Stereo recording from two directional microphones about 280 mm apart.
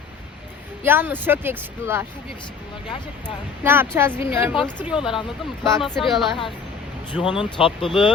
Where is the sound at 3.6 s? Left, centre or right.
Centre.